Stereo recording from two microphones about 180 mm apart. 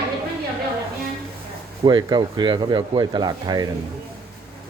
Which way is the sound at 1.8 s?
25° right (ahead or behind).